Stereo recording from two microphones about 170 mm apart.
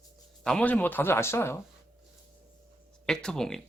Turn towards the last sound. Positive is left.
turn(degrees=5)  # may be behind; listen again after turning